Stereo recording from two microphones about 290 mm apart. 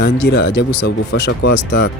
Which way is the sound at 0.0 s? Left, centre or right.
Left.